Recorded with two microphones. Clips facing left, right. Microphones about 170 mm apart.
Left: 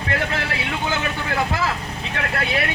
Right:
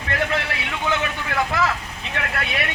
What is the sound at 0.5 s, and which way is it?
Vehicle, 30° left (ahead or behind).